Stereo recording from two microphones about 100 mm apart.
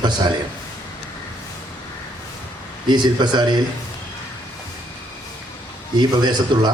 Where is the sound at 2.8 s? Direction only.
45° right (ahead or behind).